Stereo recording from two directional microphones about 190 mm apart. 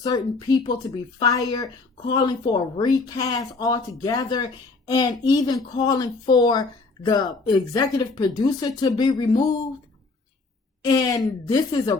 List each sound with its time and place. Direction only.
0.0 s speech: 20° left (ahead or behind)
10.8 s speech: 20° left (ahead or behind)